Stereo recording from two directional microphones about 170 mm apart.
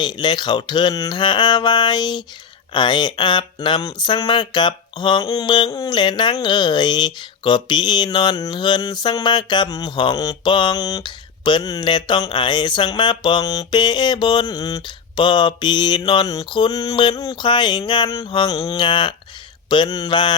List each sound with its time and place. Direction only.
0.0 s speech: 25° left (ahead or behind)